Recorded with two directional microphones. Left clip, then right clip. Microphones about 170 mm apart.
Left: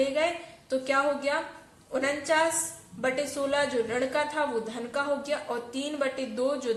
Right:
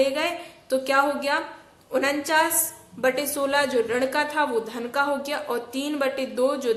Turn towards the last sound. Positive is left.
turn(degrees=-30)  # may be behind; listen again after turning